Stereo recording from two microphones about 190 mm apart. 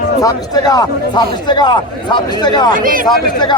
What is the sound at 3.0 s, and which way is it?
Speech, 20° left (ahead or behind).